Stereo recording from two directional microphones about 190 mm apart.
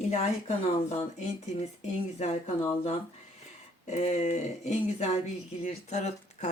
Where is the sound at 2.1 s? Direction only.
35° left (ahead or behind).